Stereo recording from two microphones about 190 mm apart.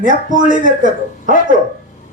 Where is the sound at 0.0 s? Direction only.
45° right (ahead or behind).